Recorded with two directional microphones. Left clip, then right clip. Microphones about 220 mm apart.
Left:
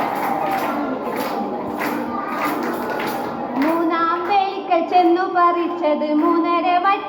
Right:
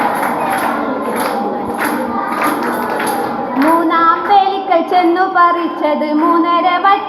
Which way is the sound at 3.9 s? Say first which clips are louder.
Right 8 dB; 35° right (ahead or behind).